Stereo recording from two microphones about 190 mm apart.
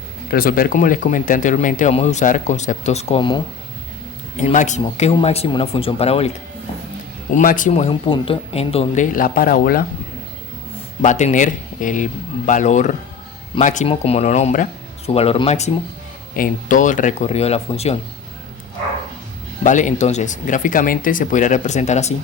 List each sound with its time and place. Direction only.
0.3 s speech: 50° left (ahead or behind); by 3.4 s 25° left (ahead or behind)
4.4 s speech: 40° left (ahead or behind)
7.3 s speech: 45° left (ahead or behind)
9.1 s speech: 50° left (ahead or behind)
11.0 s speech: 40° left (ahead or behind)
16.3 s speech: 45° left (ahead or behind)
19.6 s speech: 40° left (ahead or behind)